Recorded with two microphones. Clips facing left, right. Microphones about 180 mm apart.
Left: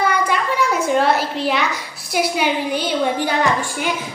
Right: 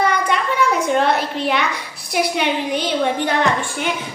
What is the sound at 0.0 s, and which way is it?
A child's voice, 5° left (ahead or behind).